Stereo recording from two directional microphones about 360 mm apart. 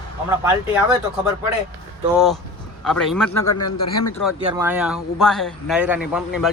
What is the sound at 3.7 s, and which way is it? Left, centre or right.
Speech, left.